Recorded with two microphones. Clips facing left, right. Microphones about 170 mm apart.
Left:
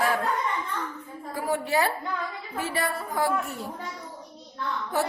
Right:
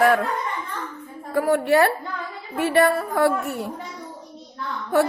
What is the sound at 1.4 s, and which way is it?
A woman's voice, 65° right (ahead or behind).